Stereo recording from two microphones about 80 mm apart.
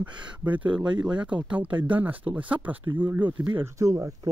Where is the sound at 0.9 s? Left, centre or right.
Right.